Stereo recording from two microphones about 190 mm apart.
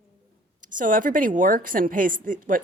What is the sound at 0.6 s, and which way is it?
A woman's voice, 45° right (ahead or behind).